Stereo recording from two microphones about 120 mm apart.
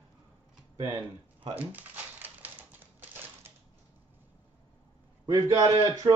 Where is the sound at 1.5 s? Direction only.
15° right (ahead or behind).